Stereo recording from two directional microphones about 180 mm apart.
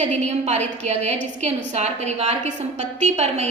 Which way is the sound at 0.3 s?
40° right (ahead or behind).